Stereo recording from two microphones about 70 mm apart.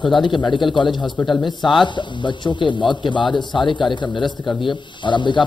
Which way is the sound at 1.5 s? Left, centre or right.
Left.